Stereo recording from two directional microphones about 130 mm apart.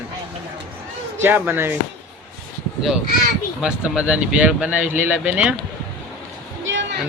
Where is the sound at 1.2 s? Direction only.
15° right (ahead or behind).